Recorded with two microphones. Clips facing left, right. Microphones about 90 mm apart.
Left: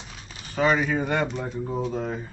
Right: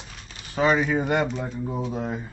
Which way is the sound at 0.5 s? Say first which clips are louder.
Right 1 dB; centre (ahead or behind).